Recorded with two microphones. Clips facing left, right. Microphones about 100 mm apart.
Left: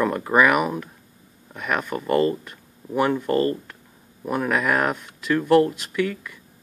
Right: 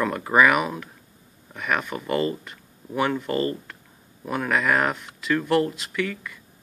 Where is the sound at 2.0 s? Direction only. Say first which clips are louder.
Left 5 dB; 40° left (ahead or behind).